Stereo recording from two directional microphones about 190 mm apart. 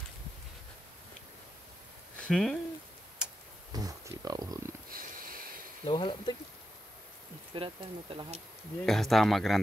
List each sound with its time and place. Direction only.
2.1 s speech: 5° left (ahead or behind)
3.7 s a sound: 20° right (ahead or behind)
4.8 s a sound: 50° right (ahead or behind)
5.9 s speech: 25° left (ahead or behind)
7.5 s speech: 25° right (ahead or behind)
8.8 s speech: centre (ahead or behind)